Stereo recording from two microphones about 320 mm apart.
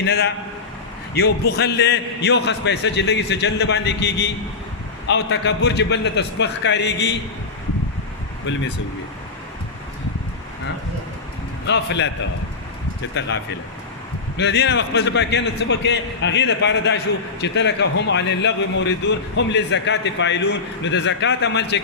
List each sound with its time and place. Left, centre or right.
0.0 s a man's voice: left
8.5 s a man's voice: left
11.6 s a man's voice: left
13.1 s a man's voice: left